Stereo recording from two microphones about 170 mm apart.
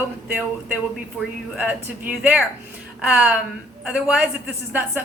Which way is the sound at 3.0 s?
10° right (ahead or behind).